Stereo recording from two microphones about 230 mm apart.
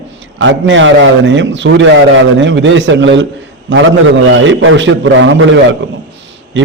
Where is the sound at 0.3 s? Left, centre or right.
Right.